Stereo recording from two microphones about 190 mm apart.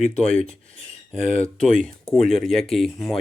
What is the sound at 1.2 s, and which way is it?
Speech, 35° left (ahead or behind).